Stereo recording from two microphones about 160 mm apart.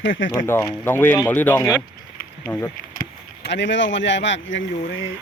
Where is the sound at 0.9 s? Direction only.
15° left (ahead or behind).